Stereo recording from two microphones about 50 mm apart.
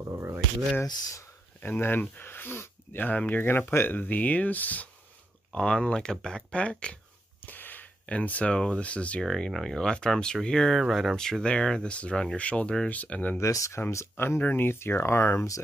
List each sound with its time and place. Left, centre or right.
0.2 s a sound: right
1.6 s speech: left
3.1 s speech: left
5.5 s speech: centre
7.4 s a sound: left
8.2 s speech: left
8.5 s speech: centre
9.2 s speech: centre
9.8 s speech: centre
10.7 s speech: centre
11.1 s speech: centre; by 13.4 s left
13.4 s speech: left
14.1 s speech: left